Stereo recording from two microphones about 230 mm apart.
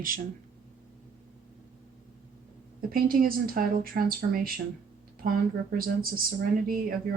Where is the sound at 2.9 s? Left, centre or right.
Right.